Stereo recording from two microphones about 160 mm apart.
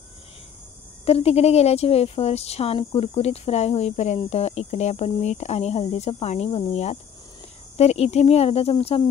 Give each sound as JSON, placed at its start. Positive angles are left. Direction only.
{"t": 1.0, "sound": "speech", "side_deg": 40}